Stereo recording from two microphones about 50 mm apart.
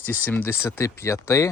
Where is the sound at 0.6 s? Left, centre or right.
Left.